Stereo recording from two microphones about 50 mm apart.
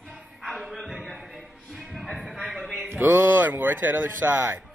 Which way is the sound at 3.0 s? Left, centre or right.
Right.